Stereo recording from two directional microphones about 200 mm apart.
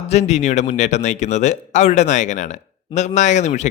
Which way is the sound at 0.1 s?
35° left (ahead or behind).